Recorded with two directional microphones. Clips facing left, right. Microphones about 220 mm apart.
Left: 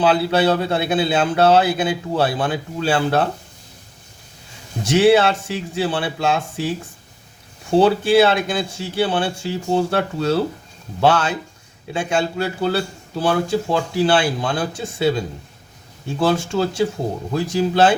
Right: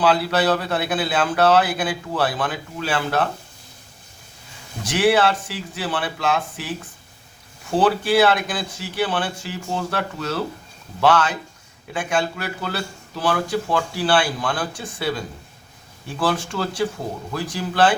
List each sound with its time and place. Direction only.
0.0 s a man's voice: 25° left (ahead or behind)
4.8 s a man's voice: 25° left (ahead or behind)